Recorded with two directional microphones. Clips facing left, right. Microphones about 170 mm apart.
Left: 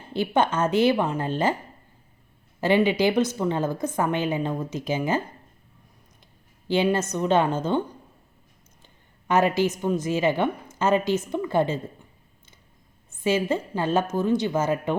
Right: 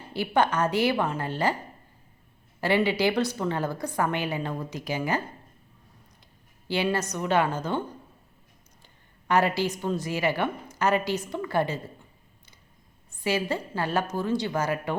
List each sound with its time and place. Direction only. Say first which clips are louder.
0.1 s a woman's voice: left 2 dB; 20° left (ahead or behind)
2.6 s a woman's voice: left 3 dB; 20° left (ahead or behind)
6.7 s a woman's voice: left 4 dB; 20° left (ahead or behind)
9.2 s a woman's voice: left 3 dB; 20° left (ahead or behind)
13.2 s a woman's voice: left 4 dB; 20° left (ahead or behind)